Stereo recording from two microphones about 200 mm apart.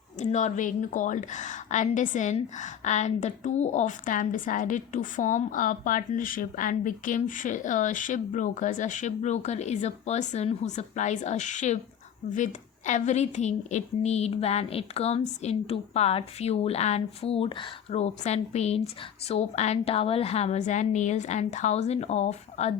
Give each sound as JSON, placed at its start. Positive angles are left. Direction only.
{"t": 0.2, "sound": "a woman's voice", "side_deg": 35}